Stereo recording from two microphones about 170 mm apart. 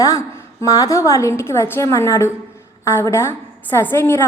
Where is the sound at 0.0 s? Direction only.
20° left (ahead or behind).